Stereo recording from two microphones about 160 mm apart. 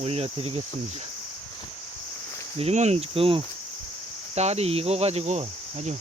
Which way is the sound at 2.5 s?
40° right (ahead or behind).